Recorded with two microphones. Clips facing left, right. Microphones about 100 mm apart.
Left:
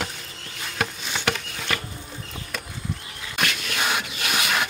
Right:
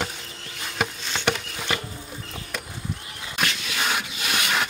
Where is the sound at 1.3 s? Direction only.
15° right (ahead or behind).